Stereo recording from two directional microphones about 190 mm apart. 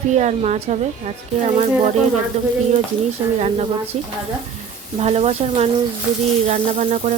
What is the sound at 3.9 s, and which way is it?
Speech, 35° right (ahead or behind).